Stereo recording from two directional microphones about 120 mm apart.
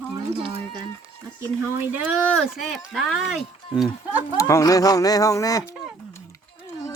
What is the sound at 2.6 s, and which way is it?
Speech, centre (ahead or behind).